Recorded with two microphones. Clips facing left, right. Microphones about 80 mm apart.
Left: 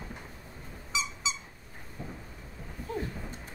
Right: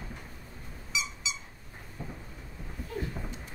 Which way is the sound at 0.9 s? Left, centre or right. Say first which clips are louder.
Left 2 dB; left.